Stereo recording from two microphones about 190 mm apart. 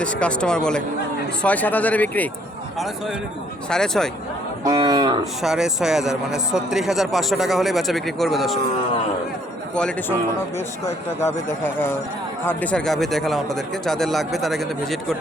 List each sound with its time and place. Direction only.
0.0 s a man's voice: 5° left (ahead or behind)
4.6 s speech: 20° right (ahead or behind)
5.4 s a man's voice: 5° right (ahead or behind)
9.7 s a man's voice: 5° left (ahead or behind)
11.3 s a man's voice: 15° left (ahead or behind)